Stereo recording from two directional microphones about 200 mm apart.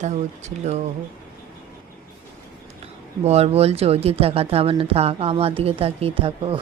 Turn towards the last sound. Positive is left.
turn(degrees=-30)  # may be behind; listen again after turning